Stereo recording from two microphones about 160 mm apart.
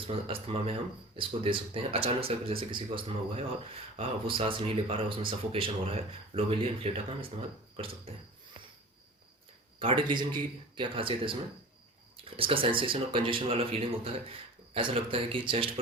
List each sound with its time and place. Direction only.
0.4 s speech: 35° right (ahead or behind)
9.8 s speech: 30° right (ahead or behind)